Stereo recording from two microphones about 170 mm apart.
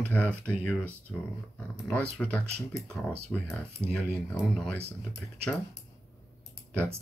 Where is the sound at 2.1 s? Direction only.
5° left (ahead or behind).